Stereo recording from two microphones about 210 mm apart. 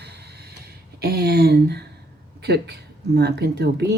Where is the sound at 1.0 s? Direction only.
50° right (ahead or behind).